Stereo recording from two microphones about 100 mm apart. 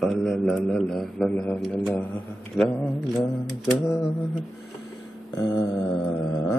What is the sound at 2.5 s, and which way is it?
Speech, 5° left (ahead or behind).